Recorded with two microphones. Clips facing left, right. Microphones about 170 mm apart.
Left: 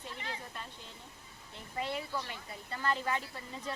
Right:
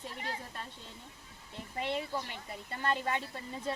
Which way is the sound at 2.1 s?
25° right (ahead or behind).